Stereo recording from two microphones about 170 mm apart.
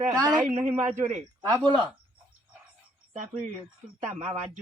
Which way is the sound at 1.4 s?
20° right (ahead or behind).